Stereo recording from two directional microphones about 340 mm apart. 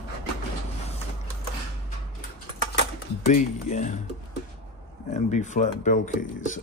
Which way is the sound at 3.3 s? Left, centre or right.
Left.